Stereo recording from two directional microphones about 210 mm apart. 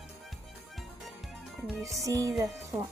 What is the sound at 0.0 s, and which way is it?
Music, centre (ahead or behind).